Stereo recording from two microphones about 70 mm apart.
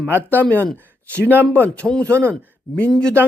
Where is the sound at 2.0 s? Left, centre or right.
Right.